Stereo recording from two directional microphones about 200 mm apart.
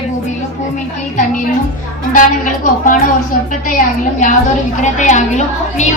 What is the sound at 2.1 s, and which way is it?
Speech, 40° left (ahead or behind).